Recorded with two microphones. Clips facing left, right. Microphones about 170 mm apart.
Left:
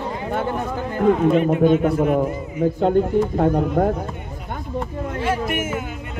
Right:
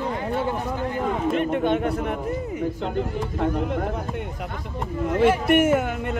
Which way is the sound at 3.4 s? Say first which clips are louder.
Left 2 dB; 45° left (ahead or behind).